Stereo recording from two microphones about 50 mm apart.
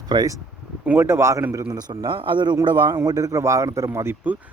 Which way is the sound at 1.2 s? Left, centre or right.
Right.